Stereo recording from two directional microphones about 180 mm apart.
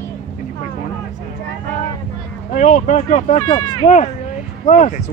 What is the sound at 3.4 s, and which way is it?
Speech, 25° left (ahead or behind).